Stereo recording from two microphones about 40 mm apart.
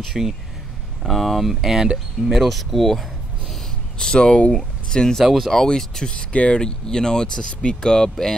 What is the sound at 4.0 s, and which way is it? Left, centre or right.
Speech, centre.